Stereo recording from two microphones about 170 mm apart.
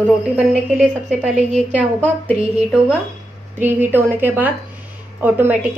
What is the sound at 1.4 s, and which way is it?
Speech, 40° right (ahead or behind).